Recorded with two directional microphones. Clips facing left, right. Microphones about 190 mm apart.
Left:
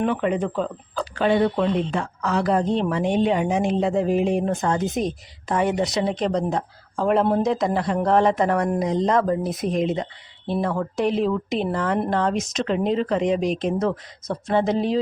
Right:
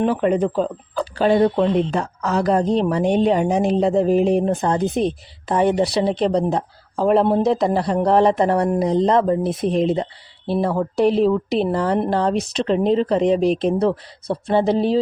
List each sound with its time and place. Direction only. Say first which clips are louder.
0.0 s a woman's voice: right 4 dB; 35° right (ahead or behind)